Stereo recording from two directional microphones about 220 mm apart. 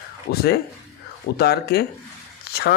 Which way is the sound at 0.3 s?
45° left (ahead or behind).